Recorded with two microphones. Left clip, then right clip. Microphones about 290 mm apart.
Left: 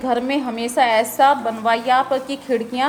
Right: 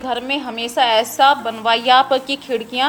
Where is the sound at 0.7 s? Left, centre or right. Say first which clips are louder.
Right 1 dB; centre.